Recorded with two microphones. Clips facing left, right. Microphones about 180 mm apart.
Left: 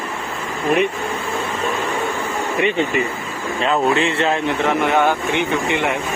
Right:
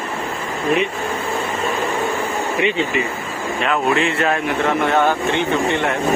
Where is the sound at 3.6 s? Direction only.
30° left (ahead or behind).